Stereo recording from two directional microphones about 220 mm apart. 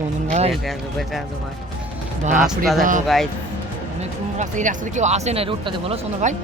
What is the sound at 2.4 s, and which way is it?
Speech, centre (ahead or behind).